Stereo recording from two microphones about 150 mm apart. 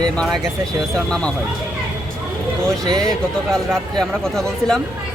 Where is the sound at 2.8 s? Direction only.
25° right (ahead or behind).